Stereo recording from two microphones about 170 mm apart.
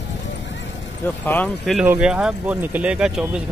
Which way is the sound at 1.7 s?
5° right (ahead or behind).